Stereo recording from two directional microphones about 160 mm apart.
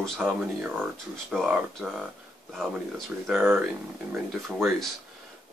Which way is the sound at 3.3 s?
10° right (ahead or behind).